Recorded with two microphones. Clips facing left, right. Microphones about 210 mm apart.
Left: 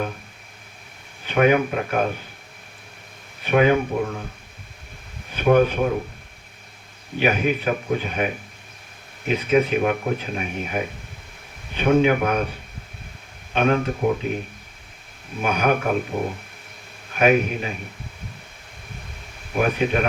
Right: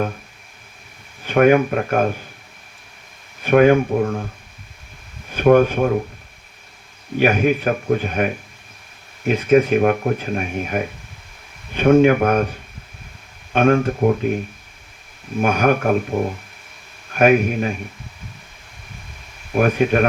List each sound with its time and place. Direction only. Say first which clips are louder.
1.3 s speech: right 4 dB; 50° right (ahead or behind)
3.4 s speech: right 5 dB; 50° right (ahead or behind)
5.3 s speech: right 4 dB; 50° right (ahead or behind)
7.2 s speech: right 5 dB; 50° right (ahead or behind)
13.5 s speech: right 5 dB; 50° right (ahead or behind)
15.4 s speech: right 4 dB; 45° right (ahead or behind)
17.2 s speech: right 4 dB; 50° right (ahead or behind)
19.5 s speech: right 5 dB; 50° right (ahead or behind)